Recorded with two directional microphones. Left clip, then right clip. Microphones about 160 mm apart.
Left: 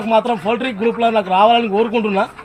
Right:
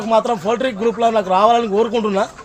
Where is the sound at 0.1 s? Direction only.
30° right (ahead or behind).